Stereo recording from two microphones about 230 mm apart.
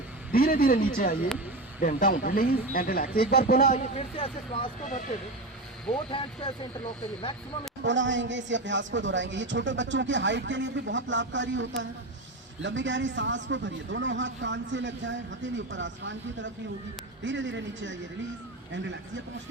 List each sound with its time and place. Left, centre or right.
0.3 s speech: left
6.1 s speech: left
7.8 s a man's voice: right